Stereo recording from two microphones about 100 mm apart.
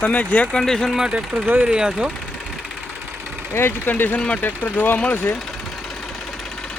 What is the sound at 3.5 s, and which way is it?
Speech, 25° left (ahead or behind).